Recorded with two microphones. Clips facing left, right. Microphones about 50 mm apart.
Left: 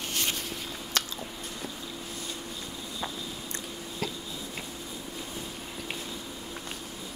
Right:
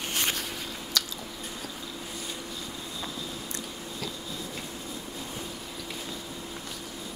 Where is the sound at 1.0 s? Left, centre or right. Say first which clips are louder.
Left 1 dB; left.